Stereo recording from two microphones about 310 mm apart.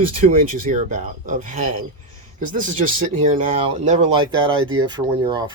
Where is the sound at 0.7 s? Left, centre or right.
Right.